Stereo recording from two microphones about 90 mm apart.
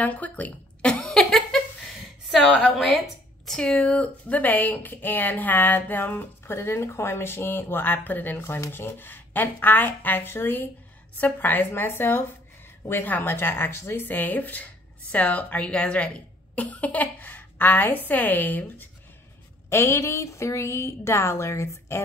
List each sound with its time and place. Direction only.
0.0 s speech: 15° left (ahead or behind)
0.9 s a sound: 5° left (ahead or behind)
2.2 s a woman's voice: centre (ahead or behind); by 18.9 s 20° left (ahead or behind)
19.7 s a woman's voice: 30° left (ahead or behind)